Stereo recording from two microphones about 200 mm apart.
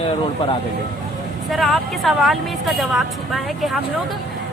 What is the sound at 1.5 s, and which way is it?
Speech, centre (ahead or behind).